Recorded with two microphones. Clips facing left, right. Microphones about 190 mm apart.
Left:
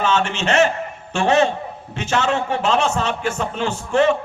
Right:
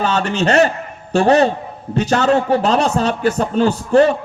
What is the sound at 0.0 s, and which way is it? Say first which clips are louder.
A man's voice: right 3 dB; 40° right (ahead or behind).